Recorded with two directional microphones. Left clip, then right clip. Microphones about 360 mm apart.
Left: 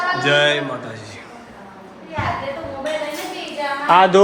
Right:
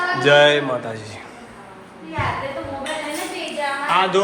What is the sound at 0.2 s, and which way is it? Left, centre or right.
Speech, centre.